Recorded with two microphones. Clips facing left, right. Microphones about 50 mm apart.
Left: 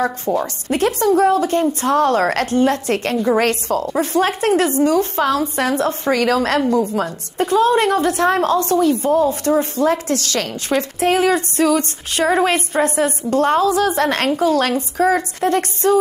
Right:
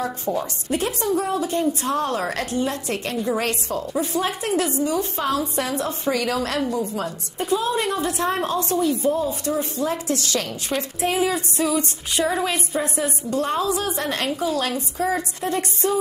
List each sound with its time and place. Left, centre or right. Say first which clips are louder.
0.4 s speech: left 7 dB; left